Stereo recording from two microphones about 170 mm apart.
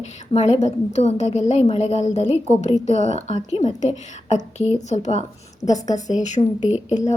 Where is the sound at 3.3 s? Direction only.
40° left (ahead or behind).